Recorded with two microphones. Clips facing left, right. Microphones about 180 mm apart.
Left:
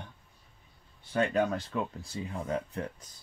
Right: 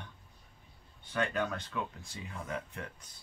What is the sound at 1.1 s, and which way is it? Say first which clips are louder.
Speech: left 6 dB; 35° left (ahead or behind).